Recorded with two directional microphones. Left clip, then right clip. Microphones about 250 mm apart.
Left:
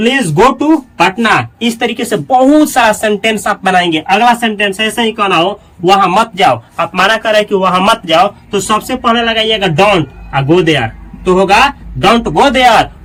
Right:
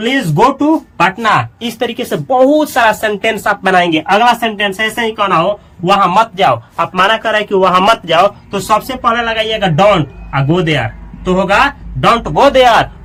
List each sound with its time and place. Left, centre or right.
0.0 s speech: centre